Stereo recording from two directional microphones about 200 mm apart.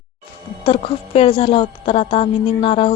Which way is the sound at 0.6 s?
30° left (ahead or behind).